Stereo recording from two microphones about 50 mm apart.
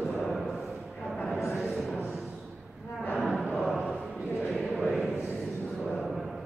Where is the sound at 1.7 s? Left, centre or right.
Centre.